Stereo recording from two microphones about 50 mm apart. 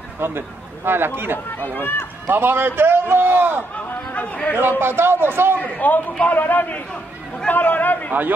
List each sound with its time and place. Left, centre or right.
0.2 s a man's voice: right
1.5 s speech: left
2.2 s a man's voice: right
3.7 s chatter: left
4.6 s a man's voice: right
5.6 s a man's voice: left
6.9 s speech: centre
7.5 s a man's voice: left